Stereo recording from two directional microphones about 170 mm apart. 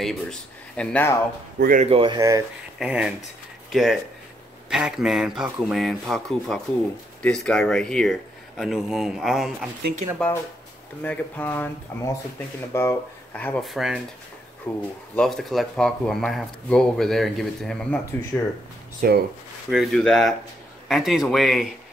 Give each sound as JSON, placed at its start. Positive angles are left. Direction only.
{"t": 0.0, "sound": "speech", "side_deg": 5}
{"t": 1.6, "sound": "speech", "side_deg": -55}
{"t": 1.9, "sound": "speech", "side_deg": -30}
{"t": 2.1, "sound": "speech", "side_deg": -20}
{"t": 2.8, "sound": "speech", "side_deg": -5}
{"t": 10.1, "sound": "speech", "side_deg": 10}
{"t": 13.7, "sound": "speech", "side_deg": 0}
{"t": 14.7, "sound": "speech", "side_deg": 15}
{"t": 15.1, "sound": "speech", "side_deg": 5}
{"t": 18.9, "sound": "speech", "side_deg": -65}
{"t": 19.7, "sound": "speech", "side_deg": 0}